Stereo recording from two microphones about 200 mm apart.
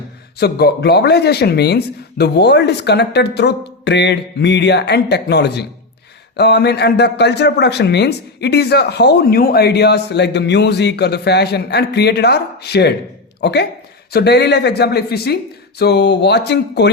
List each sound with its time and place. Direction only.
0.3 s speech: 50° left (ahead or behind)